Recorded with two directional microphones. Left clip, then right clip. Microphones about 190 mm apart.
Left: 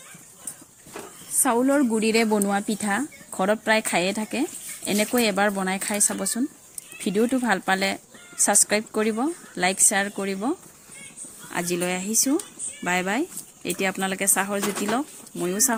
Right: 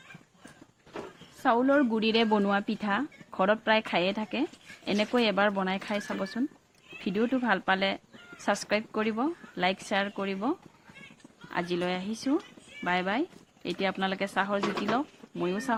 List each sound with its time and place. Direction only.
1.4 s speech: 10° left (ahead or behind)